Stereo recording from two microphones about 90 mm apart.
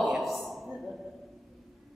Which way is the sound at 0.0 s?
Centre (ahead or behind).